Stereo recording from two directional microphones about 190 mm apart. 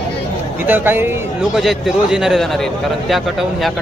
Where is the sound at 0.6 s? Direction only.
10° right (ahead or behind).